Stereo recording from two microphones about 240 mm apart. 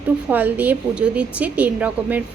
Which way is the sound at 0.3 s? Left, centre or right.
Centre.